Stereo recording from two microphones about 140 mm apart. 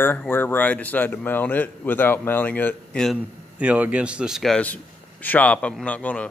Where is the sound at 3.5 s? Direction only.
10° right (ahead or behind).